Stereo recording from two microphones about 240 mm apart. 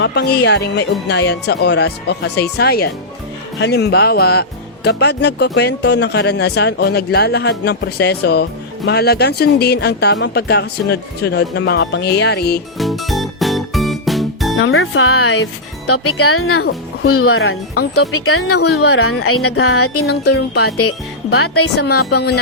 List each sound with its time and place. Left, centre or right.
0.0 s speech: left
12.7 s music: centre
14.6 s speech: left
16.6 s speech: left
17.1 s speech: left
20.1 s speech: left
20.7 s speech: left
21.8 s speech: left